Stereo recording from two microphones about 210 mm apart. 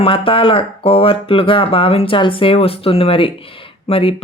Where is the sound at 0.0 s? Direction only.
25° left (ahead or behind).